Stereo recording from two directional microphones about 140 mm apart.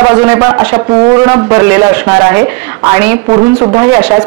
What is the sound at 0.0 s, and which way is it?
A woman's voice, 15° right (ahead or behind).